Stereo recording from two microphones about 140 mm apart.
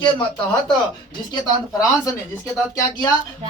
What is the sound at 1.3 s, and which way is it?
Speech, 25° left (ahead or behind).